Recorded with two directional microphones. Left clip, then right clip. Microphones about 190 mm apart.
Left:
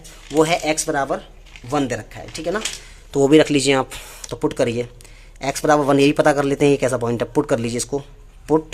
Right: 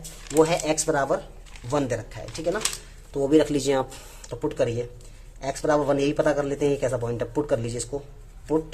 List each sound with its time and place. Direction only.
0.3 s speech: 15° left (ahead or behind)
3.1 s speech: 35° left (ahead or behind)
3.4 s speech: 20° left (ahead or behind)